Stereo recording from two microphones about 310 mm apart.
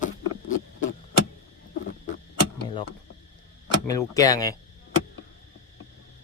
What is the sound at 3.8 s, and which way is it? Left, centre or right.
Speech, centre.